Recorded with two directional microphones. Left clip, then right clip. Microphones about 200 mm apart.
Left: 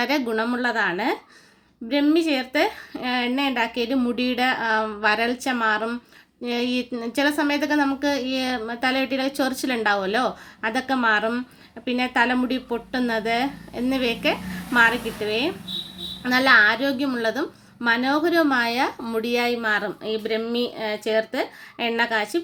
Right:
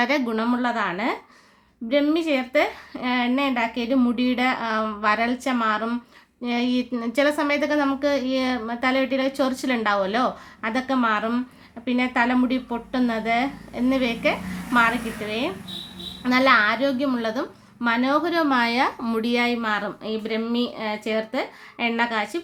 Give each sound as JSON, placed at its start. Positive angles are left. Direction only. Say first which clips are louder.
{"t": 0.0, "sound": "a woman's voice", "louder": "even", "side_deg": 0}